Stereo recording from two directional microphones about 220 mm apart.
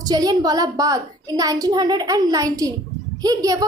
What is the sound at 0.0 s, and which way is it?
A woman's voice, 15° right (ahead or behind).